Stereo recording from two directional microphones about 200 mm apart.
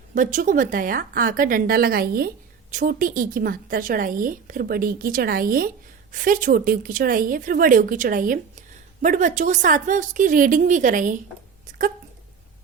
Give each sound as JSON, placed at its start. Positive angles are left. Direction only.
{"t": 0.1, "sound": "a woman's voice", "side_deg": -40}